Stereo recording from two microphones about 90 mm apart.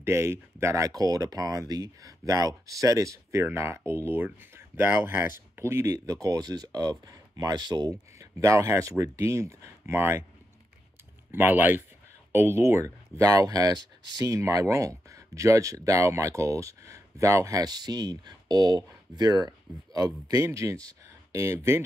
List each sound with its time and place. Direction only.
0.0 s speech: 30° right (ahead or behind)
11.3 s speech: 20° right (ahead or behind)